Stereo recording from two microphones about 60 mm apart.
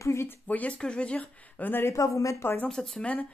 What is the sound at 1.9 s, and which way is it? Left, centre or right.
Speech, left.